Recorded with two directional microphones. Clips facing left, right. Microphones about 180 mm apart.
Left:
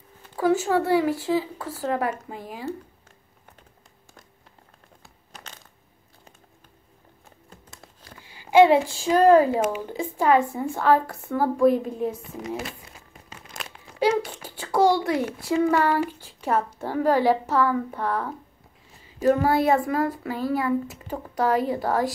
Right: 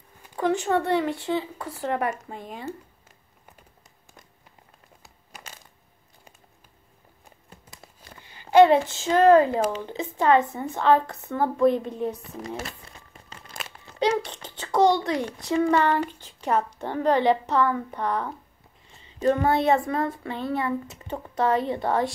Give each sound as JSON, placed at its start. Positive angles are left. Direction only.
{"t": 0.4, "sound": "a child's voice", "side_deg": 5}
{"t": 5.3, "sound": "coin", "side_deg": -10}
{"t": 7.2, "sound": "a sound", "side_deg": -5}
{"t": 8.2, "sound": "a sound", "side_deg": 10}
{"t": 8.9, "sound": "a woman's voice", "side_deg": 10}
{"t": 12.6, "sound": "crumpling", "side_deg": 5}
{"t": 14.6, "sound": "a child's voice", "side_deg": 5}
{"t": 21.1, "sound": "speech", "side_deg": -25}
{"t": 21.7, "sound": "a child's voice", "side_deg": 0}